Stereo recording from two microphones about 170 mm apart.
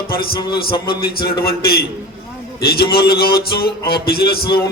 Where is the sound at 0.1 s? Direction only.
60° left (ahead or behind).